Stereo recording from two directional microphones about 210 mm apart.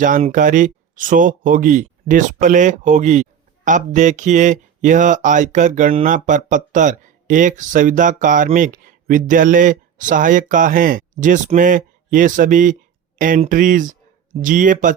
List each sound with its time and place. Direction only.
0.0 s speech: 40° right (ahead or behind)